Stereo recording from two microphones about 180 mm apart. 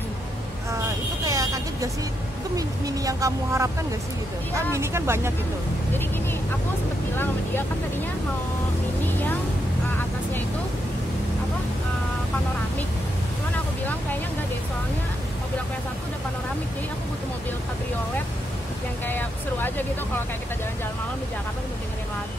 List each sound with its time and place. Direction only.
0.7 s vehicle: 15° right (ahead or behind)
2.5 s speech: 20° right (ahead or behind)
4.7 s speech: 15° right (ahead or behind)
19.0 s speech: 10° left (ahead or behind)